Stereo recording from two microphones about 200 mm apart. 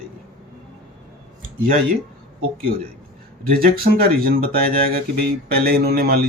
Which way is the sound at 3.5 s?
50° right (ahead or behind).